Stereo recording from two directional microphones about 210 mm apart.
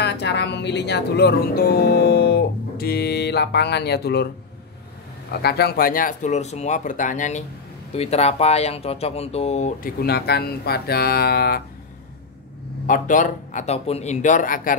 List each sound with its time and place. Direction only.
0.0 s speech: 55° left (ahead or behind)
5.4 s speech: 50° left (ahead or behind); by 9.8 s 30° left (ahead or behind)
9.9 s speech: 50° left (ahead or behind)
12.8 s speech: 40° left (ahead or behind)